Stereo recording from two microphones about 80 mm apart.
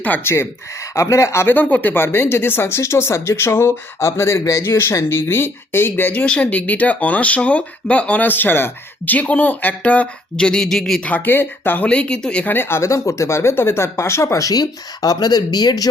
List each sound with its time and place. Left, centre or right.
0.3 s speech: left
1.5 s speech: left
6.2 s speech: centre
11.0 s speech: left
12.5 s speech: left